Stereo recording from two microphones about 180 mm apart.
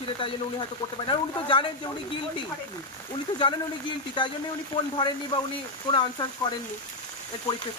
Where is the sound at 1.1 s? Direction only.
25° left (ahead or behind).